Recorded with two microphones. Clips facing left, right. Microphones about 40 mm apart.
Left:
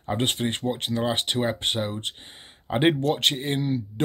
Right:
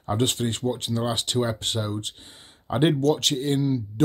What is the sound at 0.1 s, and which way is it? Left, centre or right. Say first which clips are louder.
Speech: right 1 dB; left.